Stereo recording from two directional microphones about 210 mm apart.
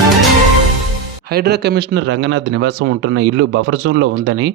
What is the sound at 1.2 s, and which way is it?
Speech, 50° right (ahead or behind).